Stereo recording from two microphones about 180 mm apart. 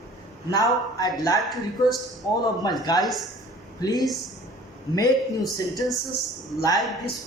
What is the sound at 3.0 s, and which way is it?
Speech, centre (ahead or behind).